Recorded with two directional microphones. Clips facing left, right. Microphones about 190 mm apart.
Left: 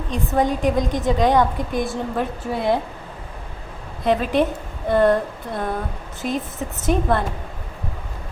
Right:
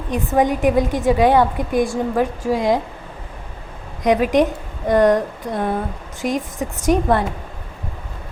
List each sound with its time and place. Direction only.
0.1 s a woman's voice: 15° right (ahead or behind)
4.0 s a woman's voice: 15° right (ahead or behind)